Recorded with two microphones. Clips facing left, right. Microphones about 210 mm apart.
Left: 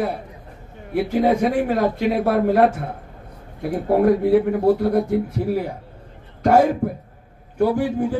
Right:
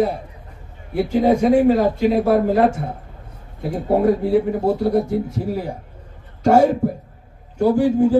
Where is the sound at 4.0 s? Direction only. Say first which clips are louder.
Left 1 dB; 60° left (ahead or behind).